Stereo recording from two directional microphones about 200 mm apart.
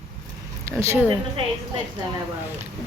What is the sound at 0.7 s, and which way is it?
Speech, 15° right (ahead or behind).